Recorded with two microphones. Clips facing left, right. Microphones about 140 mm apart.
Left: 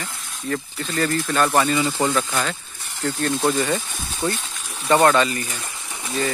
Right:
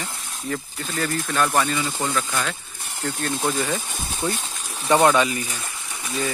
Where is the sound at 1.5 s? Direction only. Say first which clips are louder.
Left 3 dB; 10° left (ahead or behind).